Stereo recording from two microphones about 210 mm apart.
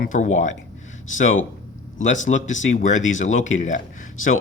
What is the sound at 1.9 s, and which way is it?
Speech, 35° left (ahead or behind).